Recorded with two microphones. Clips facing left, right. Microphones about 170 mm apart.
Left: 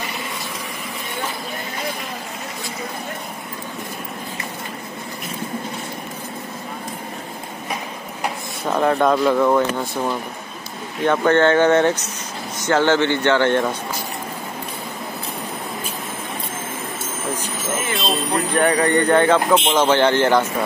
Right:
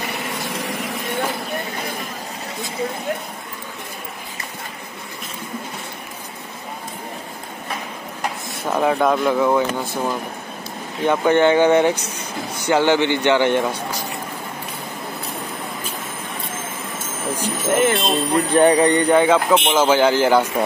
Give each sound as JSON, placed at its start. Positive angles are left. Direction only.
{"t": 0.1, "sound": "a sound", "side_deg": -70}
{"t": 8.6, "sound": "speech", "side_deg": -5}
{"t": 17.7, "sound": "speech", "side_deg": -60}
{"t": 18.5, "sound": "speech", "side_deg": -25}